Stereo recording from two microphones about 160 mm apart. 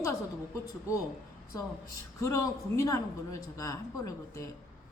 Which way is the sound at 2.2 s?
20° left (ahead or behind).